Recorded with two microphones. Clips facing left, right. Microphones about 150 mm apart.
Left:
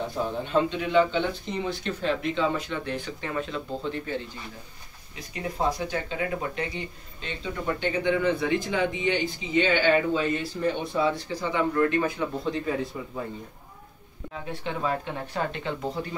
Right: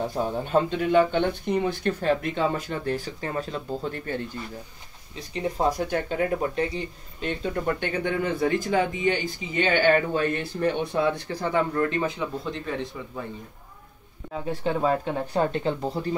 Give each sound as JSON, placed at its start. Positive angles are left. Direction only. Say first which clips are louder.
{"t": 0.2, "sound": "speech", "louder": "right 1 dB", "side_deg": -40}
{"t": 5.7, "sound": "speech", "louder": "right 3 dB", "side_deg": -50}
{"t": 6.5, "sound": "speech", "louder": "right 5 dB", "side_deg": -35}
{"t": 7.2, "sound": "speech", "louder": "right 6 dB", "side_deg": -50}
{"t": 11.7, "sound": "speech", "louder": "left 1 dB", "side_deg": -30}
{"t": 12.4, "sound": "speech", "louder": "left 3 dB", "side_deg": 5}
{"t": 14.6, "sound": "speech", "louder": "right 5 dB", "side_deg": -35}